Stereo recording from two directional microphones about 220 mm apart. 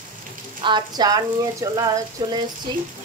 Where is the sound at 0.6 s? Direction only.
20° right (ahead or behind).